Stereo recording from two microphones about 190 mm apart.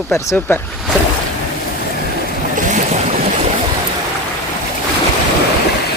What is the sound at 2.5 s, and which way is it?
Boat, 40° right (ahead or behind).